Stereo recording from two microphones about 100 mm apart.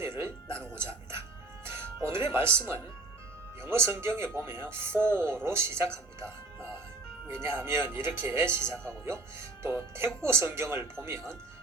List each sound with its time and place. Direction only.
0.0 s music: 25° right (ahead or behind)
1.6 s speech: 25° right (ahead or behind)